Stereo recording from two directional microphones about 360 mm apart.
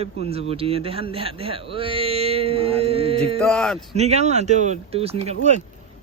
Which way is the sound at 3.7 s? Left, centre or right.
Centre.